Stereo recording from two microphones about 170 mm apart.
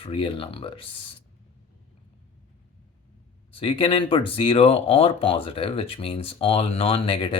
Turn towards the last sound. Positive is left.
turn(degrees=30)  # may be behind; listen again after turning